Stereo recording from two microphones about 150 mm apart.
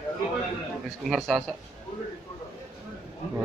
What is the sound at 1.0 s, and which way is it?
Speech, centre (ahead or behind).